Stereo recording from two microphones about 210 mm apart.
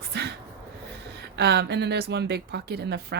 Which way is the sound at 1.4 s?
50° right (ahead or behind).